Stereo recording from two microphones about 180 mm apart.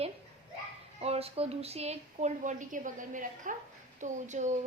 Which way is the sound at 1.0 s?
35° right (ahead or behind).